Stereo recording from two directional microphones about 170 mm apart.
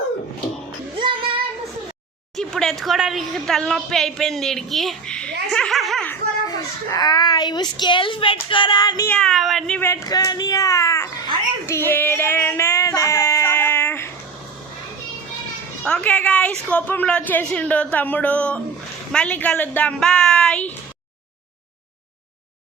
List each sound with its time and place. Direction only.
0.9 s child singing: 30° right (ahead or behind)
2.3 s speech: 5° left (ahead or behind)
5.5 s a sound: centre (ahead or behind)
6.9 s speech: 25° left (ahead or behind)
9.0 s a woman's voice: 5° left (ahead or behind)
11.6 s child singing: 15° left (ahead or behind)
15.8 s a woman's voice: 5° left (ahead or behind)